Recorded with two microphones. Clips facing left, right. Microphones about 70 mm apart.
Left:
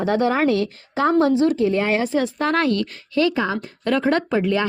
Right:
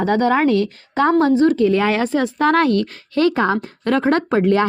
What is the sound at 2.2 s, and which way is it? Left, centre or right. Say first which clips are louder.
Speech: right 4 dB; right.